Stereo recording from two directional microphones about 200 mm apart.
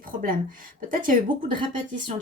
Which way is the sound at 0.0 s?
45° right (ahead or behind).